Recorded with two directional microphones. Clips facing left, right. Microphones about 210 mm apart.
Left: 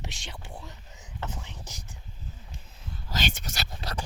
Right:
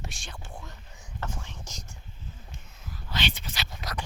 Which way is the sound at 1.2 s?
20° left (ahead or behind).